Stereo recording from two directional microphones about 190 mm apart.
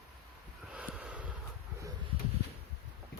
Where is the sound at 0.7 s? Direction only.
5° right (ahead or behind).